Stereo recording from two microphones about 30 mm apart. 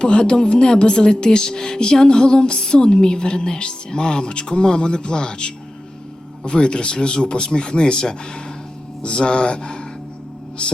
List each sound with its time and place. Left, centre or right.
0.0 s speech: left